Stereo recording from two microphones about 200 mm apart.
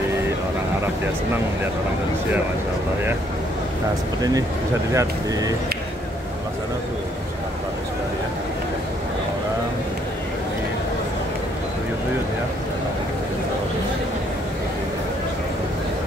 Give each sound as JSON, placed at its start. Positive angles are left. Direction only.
{"t": 4.2, "sound": "speech", "side_deg": -20}